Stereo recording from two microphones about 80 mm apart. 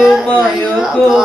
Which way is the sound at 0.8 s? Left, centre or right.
Centre.